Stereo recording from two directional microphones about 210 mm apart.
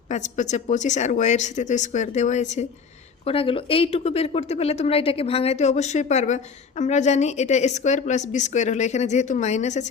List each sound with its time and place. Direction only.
0.1 s speech: 35° left (ahead or behind)